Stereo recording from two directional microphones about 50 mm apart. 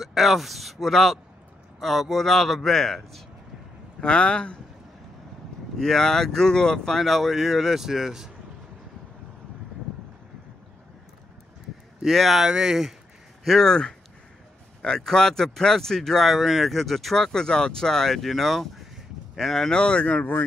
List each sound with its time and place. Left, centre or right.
0.0 s a man's voice: centre
4.0 s speech: centre
5.8 s speech: centre
7.0 s a man's voice: centre
12.0 s a man's voice: centre
12.4 s speech: centre
13.4 s speech: centre
18.9 s crow: centre
19.7 s speech: centre